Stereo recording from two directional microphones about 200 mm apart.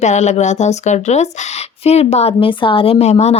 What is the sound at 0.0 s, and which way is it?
A woman's voice, 35° left (ahead or behind).